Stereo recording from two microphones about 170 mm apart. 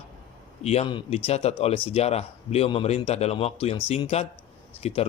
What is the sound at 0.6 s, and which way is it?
Speech, 40° left (ahead or behind).